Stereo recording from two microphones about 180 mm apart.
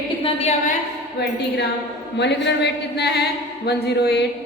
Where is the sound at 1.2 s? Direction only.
65° left (ahead or behind).